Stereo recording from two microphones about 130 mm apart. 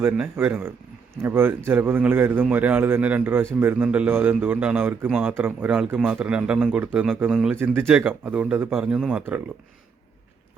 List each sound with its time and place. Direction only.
0.0 s a man's voice: 15° right (ahead or behind)
7.5 s a man's voice: 15° right (ahead or behind)